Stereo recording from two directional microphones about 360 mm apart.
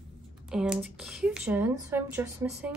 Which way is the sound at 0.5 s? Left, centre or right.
Centre.